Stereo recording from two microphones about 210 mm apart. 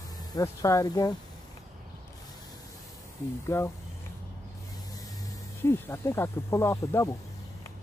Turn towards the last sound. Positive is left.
turn(degrees=15)  # may be behind; listen again after turning